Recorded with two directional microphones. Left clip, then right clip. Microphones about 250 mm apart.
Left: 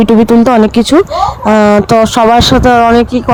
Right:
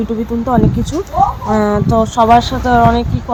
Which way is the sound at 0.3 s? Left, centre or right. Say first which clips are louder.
Left 8 dB; left.